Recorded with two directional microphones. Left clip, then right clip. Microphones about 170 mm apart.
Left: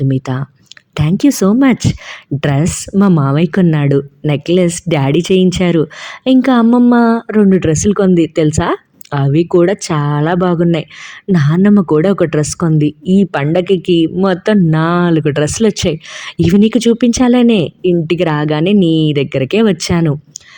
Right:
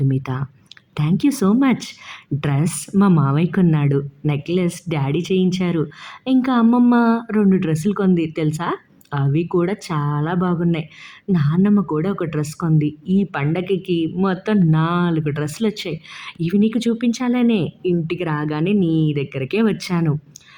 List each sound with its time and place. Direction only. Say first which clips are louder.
0.0 s speech: left 7 dB; 35° left (ahead or behind)